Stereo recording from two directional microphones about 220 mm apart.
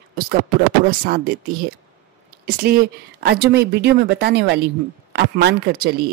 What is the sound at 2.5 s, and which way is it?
Speech, 45° right (ahead or behind).